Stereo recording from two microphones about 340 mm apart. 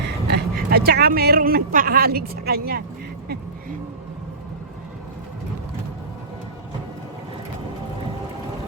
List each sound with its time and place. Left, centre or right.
0.3 s speech: right